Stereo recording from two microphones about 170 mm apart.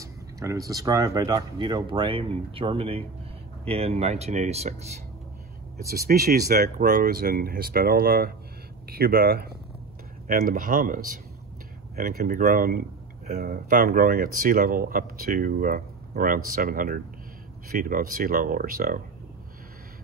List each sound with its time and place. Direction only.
0.0 s speech: 20° right (ahead or behind); by 4.7 s 40° right (ahead or behind)
5.9 s speech: 65° right (ahead or behind)
10.2 s speech: 55° right (ahead or behind)